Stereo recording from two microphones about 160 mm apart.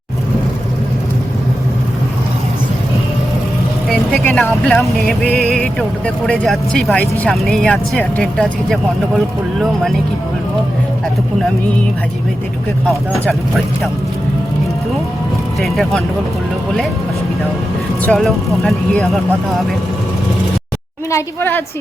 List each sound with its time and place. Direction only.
3.8 s speech: 5° left (ahead or behind)
15.6 s speech: centre (ahead or behind)
18.0 s speech: 5° left (ahead or behind)
21.1 s a woman's voice: 15° left (ahead or behind)